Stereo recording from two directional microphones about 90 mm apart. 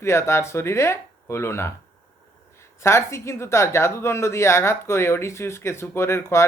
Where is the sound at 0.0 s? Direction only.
30° left (ahead or behind).